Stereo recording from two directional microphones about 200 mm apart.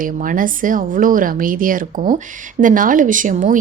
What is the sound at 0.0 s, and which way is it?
A woman's voice, 40° right (ahead or behind).